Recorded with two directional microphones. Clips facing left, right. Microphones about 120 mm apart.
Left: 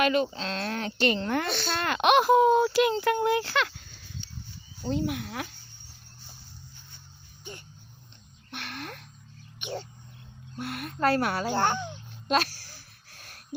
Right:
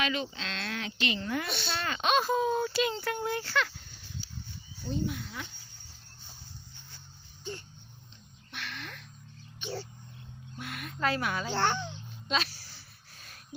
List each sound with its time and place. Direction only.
0.0 s speech: 50° left (ahead or behind)
0.3 s speech: 40° left (ahead or behind)
1.2 s a woman's voice: 65° left (ahead or behind)
4.9 s a child's voice: 80° left
8.4 s speech: 50° left (ahead or behind)
9.6 s wild animals: 15° left (ahead or behind)
10.6 s speech: 50° left (ahead or behind)
11.7 s speech: 15° left (ahead or behind)
12.3 s speech: 45° left (ahead or behind)